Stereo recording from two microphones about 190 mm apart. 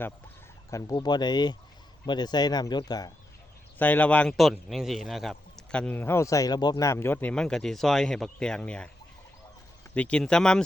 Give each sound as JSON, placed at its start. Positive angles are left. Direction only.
{"t": 0.7, "sound": "speech", "side_deg": 15}
{"t": 3.8, "sound": "a man's voice", "side_deg": 10}
{"t": 9.9, "sound": "a man's voice", "side_deg": 5}